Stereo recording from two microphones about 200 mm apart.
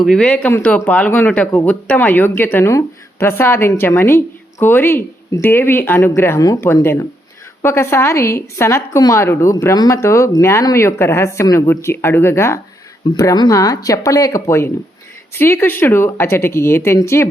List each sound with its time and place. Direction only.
0.0 s a woman's voice: 5° left (ahead or behind)